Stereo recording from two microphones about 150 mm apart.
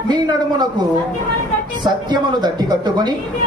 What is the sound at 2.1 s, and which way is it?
A man's voice, 25° right (ahead or behind).